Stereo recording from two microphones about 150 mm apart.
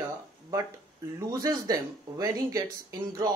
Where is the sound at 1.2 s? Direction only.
25° right (ahead or behind).